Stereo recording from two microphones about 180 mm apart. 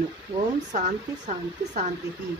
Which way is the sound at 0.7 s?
40° right (ahead or behind).